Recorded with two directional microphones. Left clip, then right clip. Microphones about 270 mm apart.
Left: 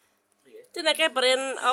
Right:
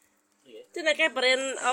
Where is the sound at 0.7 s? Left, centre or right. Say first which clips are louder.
Left 1 dB; centre.